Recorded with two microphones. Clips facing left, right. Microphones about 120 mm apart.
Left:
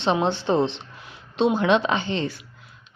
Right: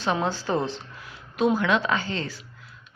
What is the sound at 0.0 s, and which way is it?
Speech, 25° left (ahead or behind).